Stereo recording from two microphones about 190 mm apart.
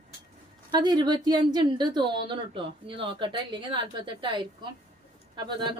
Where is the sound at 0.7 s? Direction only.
20° right (ahead or behind).